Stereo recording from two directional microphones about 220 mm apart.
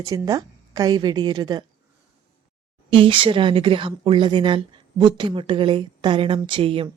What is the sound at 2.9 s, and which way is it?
Speech, 25° right (ahead or behind).